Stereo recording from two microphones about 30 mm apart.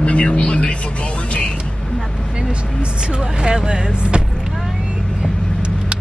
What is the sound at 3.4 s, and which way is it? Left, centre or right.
Speech, right.